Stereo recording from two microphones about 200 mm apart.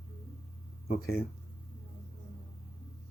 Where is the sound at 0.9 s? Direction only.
50° left (ahead or behind).